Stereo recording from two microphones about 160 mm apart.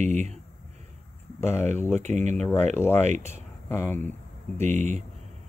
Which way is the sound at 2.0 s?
45° right (ahead or behind).